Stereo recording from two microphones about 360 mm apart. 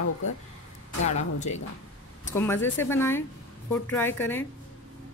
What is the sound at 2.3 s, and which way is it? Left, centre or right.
Speech, centre.